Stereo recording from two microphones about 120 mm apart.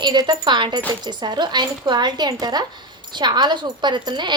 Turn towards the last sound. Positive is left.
turn(degrees=-40)  # may be behind; listen again after turning